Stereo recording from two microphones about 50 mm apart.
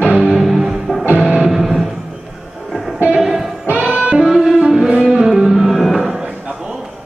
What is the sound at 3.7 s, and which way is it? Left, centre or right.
Saxophone, right.